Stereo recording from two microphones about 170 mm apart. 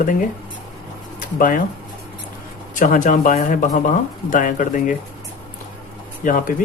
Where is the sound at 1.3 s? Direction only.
50° left (ahead or behind).